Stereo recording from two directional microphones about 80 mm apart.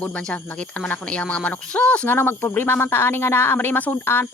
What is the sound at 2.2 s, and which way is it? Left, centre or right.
Speech, left.